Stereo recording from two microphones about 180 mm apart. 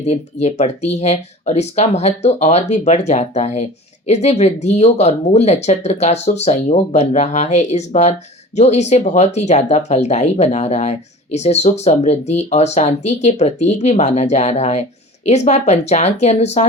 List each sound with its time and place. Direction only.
0.0 s speech: 40° left (ahead or behind)